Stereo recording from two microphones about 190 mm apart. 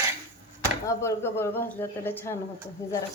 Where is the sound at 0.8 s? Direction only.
15° left (ahead or behind).